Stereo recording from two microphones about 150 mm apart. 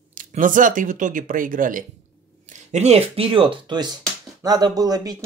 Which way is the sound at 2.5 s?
50° right (ahead or behind).